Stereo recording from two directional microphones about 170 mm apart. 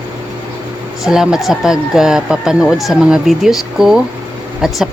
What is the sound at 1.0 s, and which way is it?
Speech, 5° right (ahead or behind).